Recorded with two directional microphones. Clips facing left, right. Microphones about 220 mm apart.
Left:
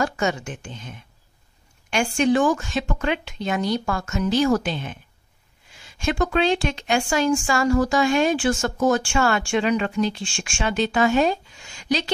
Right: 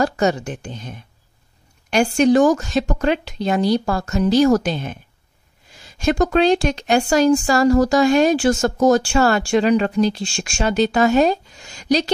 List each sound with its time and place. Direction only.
0.0 s a woman's voice: 35° right (ahead or behind)